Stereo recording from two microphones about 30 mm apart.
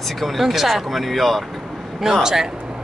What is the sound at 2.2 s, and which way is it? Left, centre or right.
Speech, centre.